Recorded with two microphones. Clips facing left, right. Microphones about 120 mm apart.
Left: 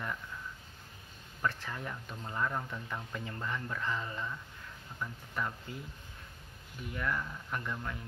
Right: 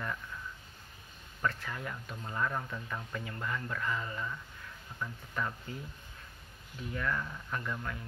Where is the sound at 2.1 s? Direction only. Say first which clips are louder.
Even; 5° left (ahead or behind).